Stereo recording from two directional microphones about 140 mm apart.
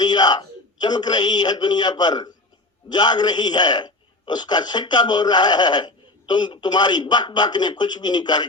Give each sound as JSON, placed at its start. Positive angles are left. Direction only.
{"t": 0.0, "sound": "a man's voice", "side_deg": 30}